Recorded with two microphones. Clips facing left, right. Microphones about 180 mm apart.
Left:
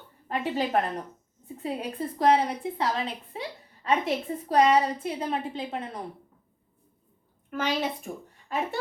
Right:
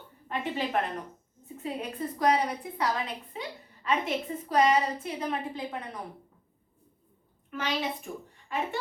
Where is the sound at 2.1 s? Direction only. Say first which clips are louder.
Left 4 dB; 25° left (ahead or behind).